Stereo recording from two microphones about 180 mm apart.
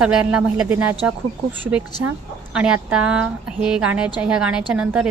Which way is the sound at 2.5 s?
5° right (ahead or behind).